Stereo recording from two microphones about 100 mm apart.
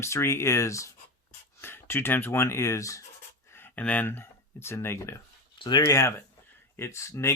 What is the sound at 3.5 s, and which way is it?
Speech, 20° left (ahead or behind).